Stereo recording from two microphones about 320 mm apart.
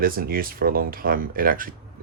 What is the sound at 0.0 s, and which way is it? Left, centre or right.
Speech, right.